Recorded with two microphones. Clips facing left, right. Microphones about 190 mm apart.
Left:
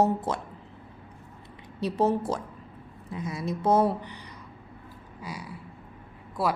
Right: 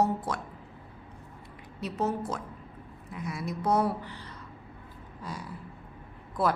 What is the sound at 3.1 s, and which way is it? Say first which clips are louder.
A woman's voice: left 3 dB; 20° left (ahead or behind).